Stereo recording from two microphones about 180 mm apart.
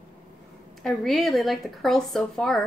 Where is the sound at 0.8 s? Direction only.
Centre (ahead or behind).